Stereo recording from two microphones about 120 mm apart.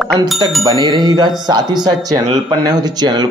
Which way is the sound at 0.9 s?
35° right (ahead or behind).